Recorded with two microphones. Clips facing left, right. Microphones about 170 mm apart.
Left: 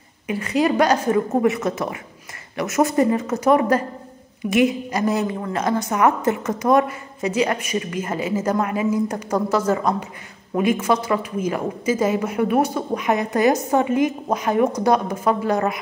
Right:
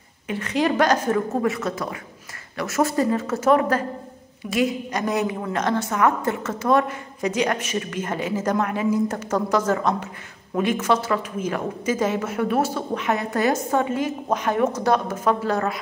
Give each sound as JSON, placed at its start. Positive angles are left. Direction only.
{"t": 0.3, "sound": "a woman's voice", "side_deg": 10}
{"t": 4.9, "sound": "a man's voice", "side_deg": 5}